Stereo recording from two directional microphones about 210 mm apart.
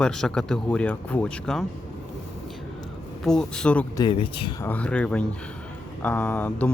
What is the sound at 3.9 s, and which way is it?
Speech, 20° left (ahead or behind).